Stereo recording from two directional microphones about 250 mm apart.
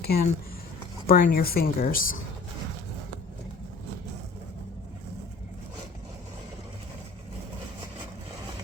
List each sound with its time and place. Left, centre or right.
0.0 s speech: left